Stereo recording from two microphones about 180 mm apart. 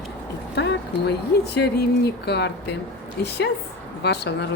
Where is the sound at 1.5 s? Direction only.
65° left (ahead or behind).